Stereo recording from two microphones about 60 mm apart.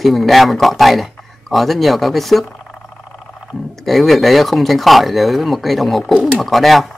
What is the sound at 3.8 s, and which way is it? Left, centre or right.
Speech, centre.